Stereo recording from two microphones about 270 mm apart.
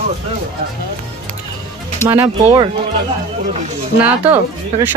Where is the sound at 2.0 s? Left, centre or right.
Centre.